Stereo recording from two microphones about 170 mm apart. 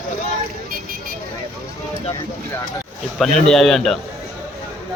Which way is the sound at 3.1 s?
Centre (ahead or behind).